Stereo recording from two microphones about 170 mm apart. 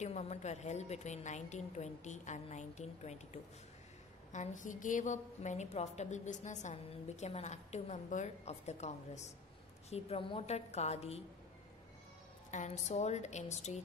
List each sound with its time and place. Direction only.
0.0 s a woman's voice: 40° left (ahead or behind)
4.3 s a woman's voice: 45° left (ahead or behind)
12.4 s a woman's voice: 45° left (ahead or behind)